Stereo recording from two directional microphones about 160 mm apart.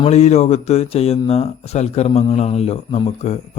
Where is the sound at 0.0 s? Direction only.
45° left (ahead or behind).